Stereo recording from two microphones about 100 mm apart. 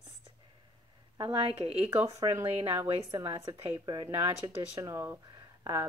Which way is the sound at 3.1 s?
35° right (ahead or behind).